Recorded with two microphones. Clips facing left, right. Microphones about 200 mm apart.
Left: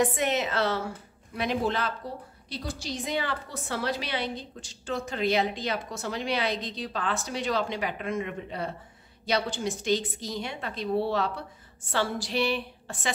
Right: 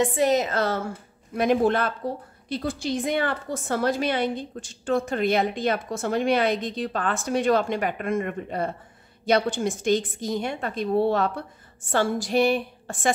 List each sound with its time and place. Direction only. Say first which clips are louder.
0.0 s a woman's voice: right 5 dB; 35° right (ahead or behind)